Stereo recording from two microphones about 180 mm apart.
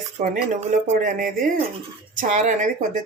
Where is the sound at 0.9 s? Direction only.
45° right (ahead or behind).